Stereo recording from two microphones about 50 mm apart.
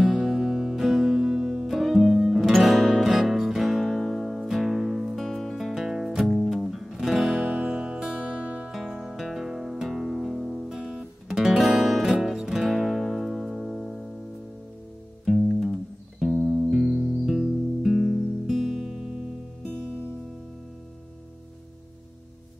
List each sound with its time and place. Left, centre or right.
0.0 s music: centre
3.8 s music: centre
4.6 s music: centre
5.2 s music: centre
6.2 s music: centre
8.2 s music: right
8.6 s music: centre
10.7 s guitar: centre
11.5 s music: centre
15.2 s music: centre
16.7 s music: centre